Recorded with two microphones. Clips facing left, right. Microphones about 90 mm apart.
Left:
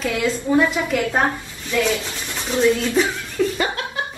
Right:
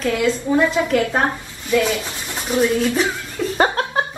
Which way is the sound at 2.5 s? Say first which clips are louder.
Even; 15° right (ahead or behind).